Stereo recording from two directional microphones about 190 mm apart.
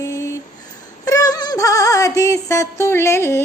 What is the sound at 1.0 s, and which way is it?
Music, 20° left (ahead or behind).